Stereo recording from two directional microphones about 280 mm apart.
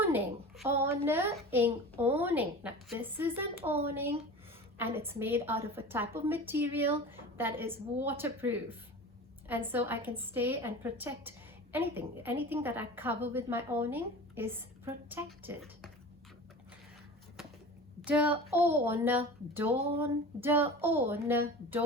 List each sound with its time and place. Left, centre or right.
0.7 s a woman's voice: centre
3.6 s speech: centre
4.9 s a woman's voice: centre
18.0 s a woman's voice: centre
19.7 s speech: right
20.0 s a woman's voice: centre